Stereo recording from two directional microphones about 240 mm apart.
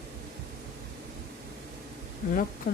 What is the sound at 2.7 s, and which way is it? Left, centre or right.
Speech, left.